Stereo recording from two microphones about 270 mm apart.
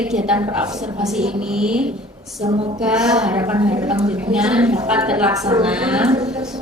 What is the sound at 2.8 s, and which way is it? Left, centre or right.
A woman's voice, centre.